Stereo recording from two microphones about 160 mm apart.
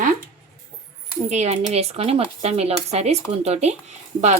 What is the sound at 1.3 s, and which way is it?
A woman's voice, 40° right (ahead or behind).